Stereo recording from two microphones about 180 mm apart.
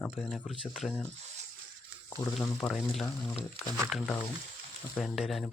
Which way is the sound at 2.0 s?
15° left (ahead or behind).